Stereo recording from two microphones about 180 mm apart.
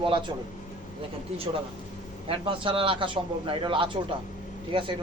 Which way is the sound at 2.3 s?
30° right (ahead or behind).